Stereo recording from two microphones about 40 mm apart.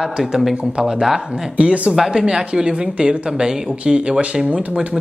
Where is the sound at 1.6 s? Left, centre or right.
Right.